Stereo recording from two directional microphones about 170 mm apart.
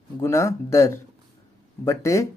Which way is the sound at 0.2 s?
15° left (ahead or behind).